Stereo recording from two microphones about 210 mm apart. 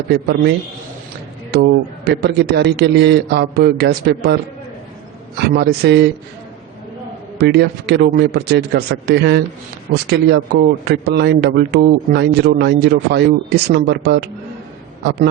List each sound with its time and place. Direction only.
0.1 s speech: 50° right (ahead or behind)
2.0 s speech: 50° right (ahead or behind)
5.5 s speech: 50° right (ahead or behind)
7.3 s speech: 50° right (ahead or behind)